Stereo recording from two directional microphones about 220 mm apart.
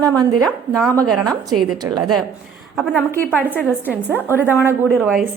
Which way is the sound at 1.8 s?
20° right (ahead or behind).